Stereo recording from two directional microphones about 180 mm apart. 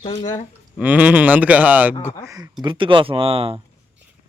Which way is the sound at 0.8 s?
10° right (ahead or behind).